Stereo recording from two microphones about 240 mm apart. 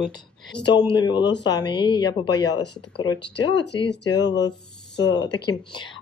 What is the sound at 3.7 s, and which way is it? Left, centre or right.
Speech, centre.